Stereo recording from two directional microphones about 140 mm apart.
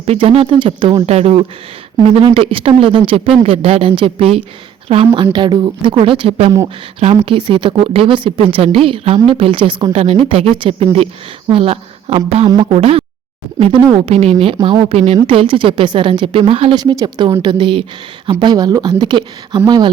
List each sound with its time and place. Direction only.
0.0 s speech: 45° right (ahead or behind)
17.0 s speech: 30° right (ahead or behind)